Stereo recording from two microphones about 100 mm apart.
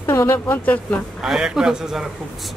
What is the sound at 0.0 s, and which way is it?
Speech, 30° left (ahead or behind).